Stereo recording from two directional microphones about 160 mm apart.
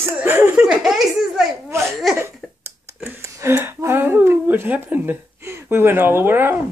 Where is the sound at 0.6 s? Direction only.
Centre (ahead or behind).